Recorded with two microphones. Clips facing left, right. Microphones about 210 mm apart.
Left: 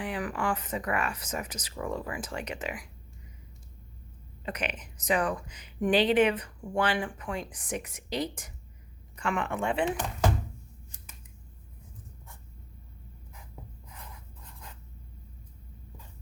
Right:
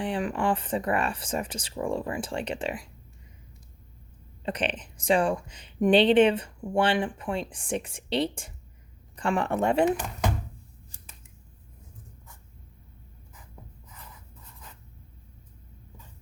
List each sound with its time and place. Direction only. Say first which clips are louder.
0.0 s speech: right 4 dB; 25° right (ahead or behind)
4.4 s speech: right 5 dB; 30° right (ahead or behind)